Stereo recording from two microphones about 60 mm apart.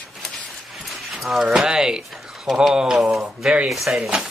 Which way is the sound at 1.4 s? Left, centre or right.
Centre.